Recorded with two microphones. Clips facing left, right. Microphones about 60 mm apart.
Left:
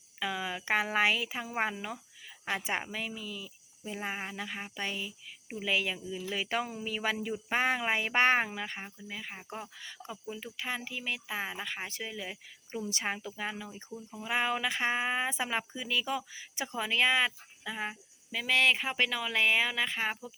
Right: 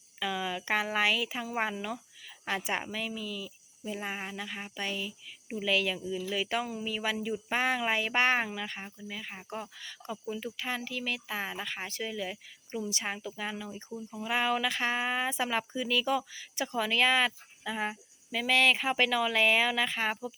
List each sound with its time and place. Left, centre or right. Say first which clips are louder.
0.2 s speech: right 2 dB; left
2.9 s speech: right 2 dB; left
6.2 s speech: even; left
9.3 s speech: right 2 dB; centre
9.7 s speech: right 3 dB; centre
12.9 s speech: left 1 dB; left; by 20.3 s centre